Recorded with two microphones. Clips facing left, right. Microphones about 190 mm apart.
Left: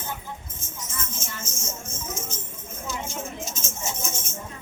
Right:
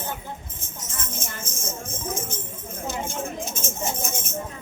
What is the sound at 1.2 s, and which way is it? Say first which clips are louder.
Music: right 2 dB; 55° right (ahead or behind).